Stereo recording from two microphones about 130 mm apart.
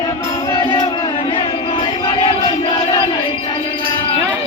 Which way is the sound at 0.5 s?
35° left (ahead or behind).